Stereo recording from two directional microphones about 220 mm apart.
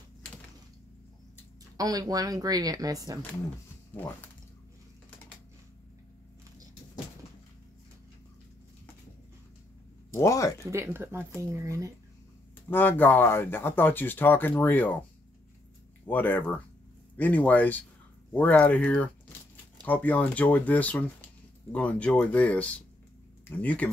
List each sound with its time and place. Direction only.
1.8 s speech: 15° right (ahead or behind)
3.9 s speech: 10° left (ahead or behind)
10.1 s speech: 15° left (ahead or behind)
10.6 s speech: 10° right (ahead or behind)
12.6 s speech: 10° left (ahead or behind)
16.1 s speech: 10° left (ahead or behind)